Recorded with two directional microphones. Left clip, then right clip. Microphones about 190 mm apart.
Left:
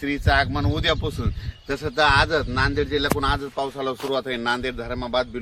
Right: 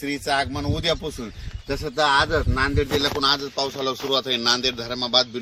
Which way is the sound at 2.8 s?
20° right (ahead or behind).